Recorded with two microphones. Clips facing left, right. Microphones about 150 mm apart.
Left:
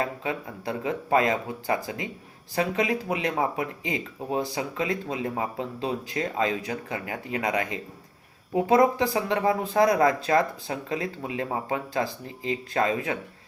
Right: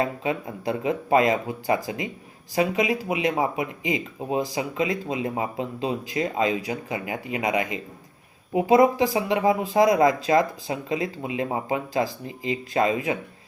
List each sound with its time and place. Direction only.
0.0 s speech: 20° right (ahead or behind)